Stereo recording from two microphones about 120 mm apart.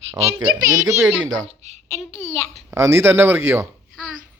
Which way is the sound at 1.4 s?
65° right (ahead or behind).